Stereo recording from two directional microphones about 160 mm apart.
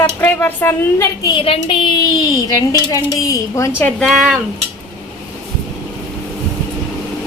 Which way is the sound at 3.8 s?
5° left (ahead or behind).